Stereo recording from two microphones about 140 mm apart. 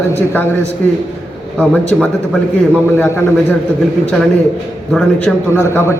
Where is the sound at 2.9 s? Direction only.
15° left (ahead or behind).